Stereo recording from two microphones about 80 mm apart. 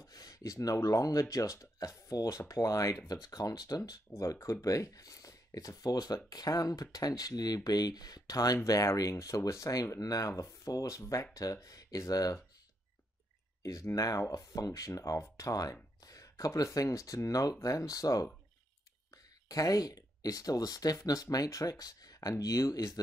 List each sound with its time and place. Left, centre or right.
0.0 s speech: left
4.1 s speech: left
13.6 s speech: left
19.5 s speech: left